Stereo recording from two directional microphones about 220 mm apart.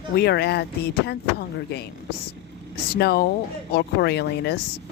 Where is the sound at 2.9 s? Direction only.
45° left (ahead or behind).